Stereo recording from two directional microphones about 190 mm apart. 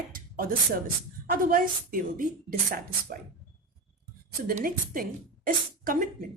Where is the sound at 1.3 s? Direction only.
50° right (ahead or behind).